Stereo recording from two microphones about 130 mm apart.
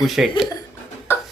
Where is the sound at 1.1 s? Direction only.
20° left (ahead or behind).